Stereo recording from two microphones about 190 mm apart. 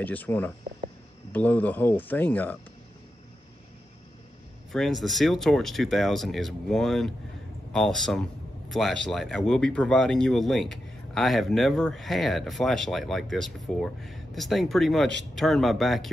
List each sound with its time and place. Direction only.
0.0 s speech: 10° left (ahead or behind)
4.7 s a man's voice: centre (ahead or behind)